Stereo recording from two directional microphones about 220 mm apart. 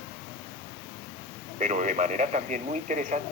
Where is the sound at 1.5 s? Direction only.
35° right (ahead or behind).